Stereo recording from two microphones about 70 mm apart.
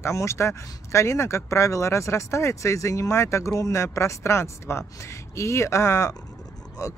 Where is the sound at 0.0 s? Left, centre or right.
Left.